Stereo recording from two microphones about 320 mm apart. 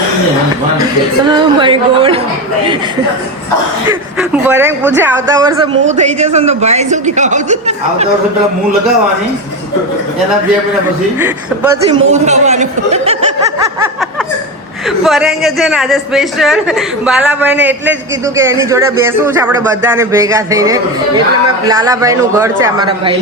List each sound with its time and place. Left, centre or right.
1.3 s speech: centre
3.8 s a man's voice: centre; by 8.0 s right
11.2 s speech: centre
12.0 s speech: right
14.8 s a man's voice: centre